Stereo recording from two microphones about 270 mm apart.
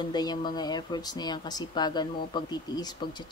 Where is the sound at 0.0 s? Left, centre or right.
Centre.